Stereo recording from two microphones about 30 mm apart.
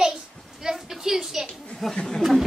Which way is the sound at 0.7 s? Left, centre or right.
Centre.